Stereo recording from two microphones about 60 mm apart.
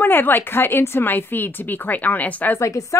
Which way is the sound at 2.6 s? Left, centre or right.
Left.